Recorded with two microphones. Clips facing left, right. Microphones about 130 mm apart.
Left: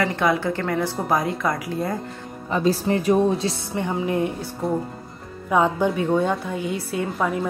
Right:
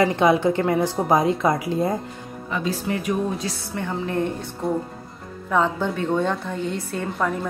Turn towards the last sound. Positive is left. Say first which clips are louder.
# left 1 dB
turn(degrees=5)  # may be behind; listen again after turning